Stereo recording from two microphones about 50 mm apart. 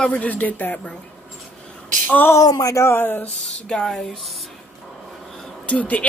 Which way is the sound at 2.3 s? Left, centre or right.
Left.